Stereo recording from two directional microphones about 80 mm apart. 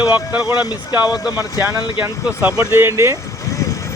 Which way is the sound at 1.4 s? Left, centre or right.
Right.